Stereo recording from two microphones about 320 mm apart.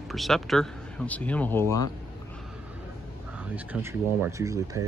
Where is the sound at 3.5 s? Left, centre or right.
Centre.